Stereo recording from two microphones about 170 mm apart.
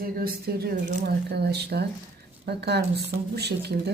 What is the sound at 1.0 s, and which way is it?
Speech, 70° right (ahead or behind).